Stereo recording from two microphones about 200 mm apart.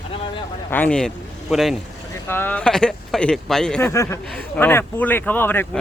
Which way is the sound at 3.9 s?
15° left (ahead or behind).